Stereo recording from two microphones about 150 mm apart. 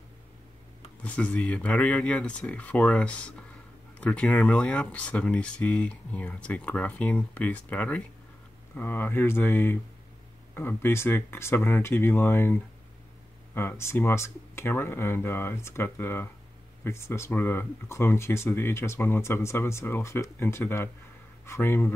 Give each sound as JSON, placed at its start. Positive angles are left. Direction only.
{"t": 1.0, "sound": "speech", "side_deg": 10}